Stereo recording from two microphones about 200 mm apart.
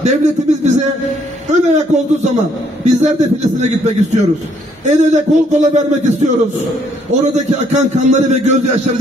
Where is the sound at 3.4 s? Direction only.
35° right (ahead or behind).